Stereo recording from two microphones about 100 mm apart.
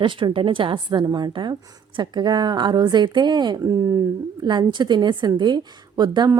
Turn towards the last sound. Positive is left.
turn(degrees=-45)  # may be behind; listen again after turning